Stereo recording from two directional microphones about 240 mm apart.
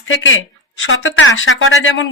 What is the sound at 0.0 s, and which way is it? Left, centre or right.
A woman's voice, left.